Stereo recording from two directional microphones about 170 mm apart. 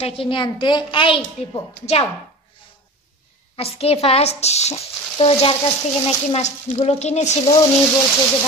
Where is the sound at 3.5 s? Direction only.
35° left (ahead or behind).